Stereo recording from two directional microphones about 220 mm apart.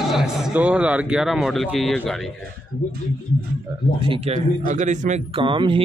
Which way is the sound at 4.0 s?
25° right (ahead or behind).